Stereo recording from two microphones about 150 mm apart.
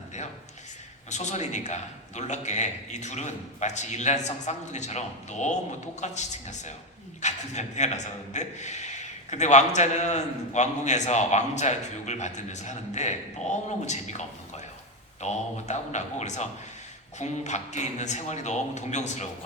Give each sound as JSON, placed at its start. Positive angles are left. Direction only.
{"t": 1.1, "sound": "a man's voice", "side_deg": 50}